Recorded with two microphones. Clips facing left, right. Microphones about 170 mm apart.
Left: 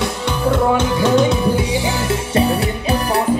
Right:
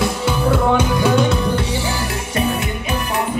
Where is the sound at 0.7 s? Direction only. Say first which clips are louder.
Left 1 dB; centre (ahead or behind).